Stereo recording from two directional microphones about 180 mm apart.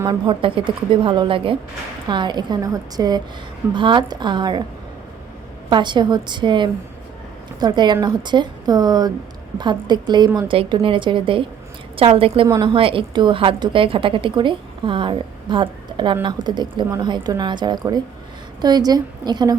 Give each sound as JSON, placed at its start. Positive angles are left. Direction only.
{"t": 0.0, "sound": "a woman's voice", "side_deg": -25}
{"t": 5.6, "sound": "a woman's voice", "side_deg": -25}